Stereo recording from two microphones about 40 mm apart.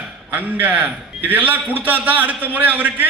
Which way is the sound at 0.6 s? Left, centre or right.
Right.